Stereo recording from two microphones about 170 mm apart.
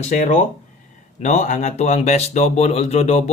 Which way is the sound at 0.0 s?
45° left (ahead or behind).